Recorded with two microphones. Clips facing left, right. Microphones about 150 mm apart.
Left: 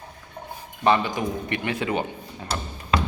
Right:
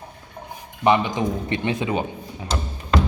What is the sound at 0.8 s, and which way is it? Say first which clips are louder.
Speech: right 2 dB; 20° right (ahead or behind).